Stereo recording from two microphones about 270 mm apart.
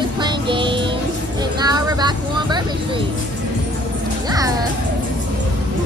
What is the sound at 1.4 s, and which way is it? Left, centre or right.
Vehicle, centre.